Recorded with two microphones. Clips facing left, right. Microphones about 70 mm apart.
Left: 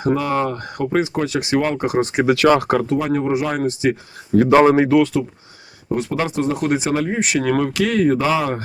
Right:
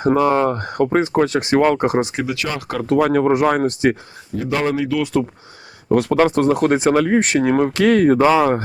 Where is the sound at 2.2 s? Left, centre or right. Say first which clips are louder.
Left 10 dB; left.